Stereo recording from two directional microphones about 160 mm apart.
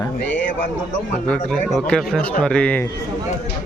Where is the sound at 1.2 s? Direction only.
5° left (ahead or behind).